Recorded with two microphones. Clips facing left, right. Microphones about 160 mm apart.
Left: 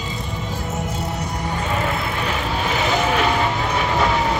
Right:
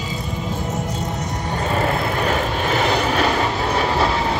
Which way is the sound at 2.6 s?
45° right (ahead or behind).